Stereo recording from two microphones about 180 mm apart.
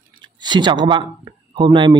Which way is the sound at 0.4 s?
25° right (ahead or behind).